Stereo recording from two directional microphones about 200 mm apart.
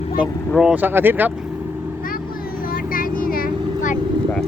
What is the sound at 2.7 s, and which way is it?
Vehicle, 45° left (ahead or behind).